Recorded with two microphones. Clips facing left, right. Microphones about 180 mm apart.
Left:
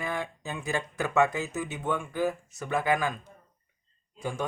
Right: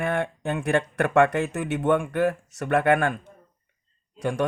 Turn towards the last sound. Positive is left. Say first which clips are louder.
# right 7 dB
turn(degrees=-80)